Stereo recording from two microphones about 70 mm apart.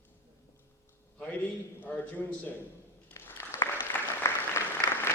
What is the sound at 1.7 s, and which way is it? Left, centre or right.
Speech, left.